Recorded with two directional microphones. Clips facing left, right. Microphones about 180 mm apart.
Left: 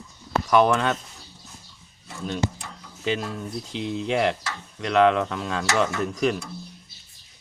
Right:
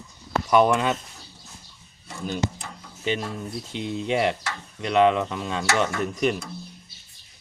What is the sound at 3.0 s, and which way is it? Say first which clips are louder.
Speech: even; centre (ahead or behind).